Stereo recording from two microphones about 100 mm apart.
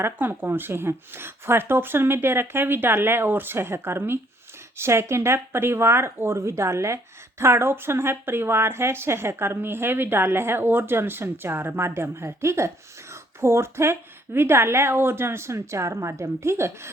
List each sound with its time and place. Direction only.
0.0 s speech: 20° right (ahead or behind)